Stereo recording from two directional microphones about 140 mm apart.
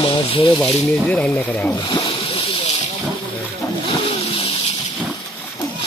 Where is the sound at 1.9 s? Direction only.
30° left (ahead or behind).